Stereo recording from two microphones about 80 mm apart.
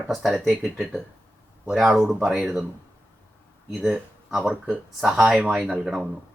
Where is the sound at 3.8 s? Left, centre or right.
Centre.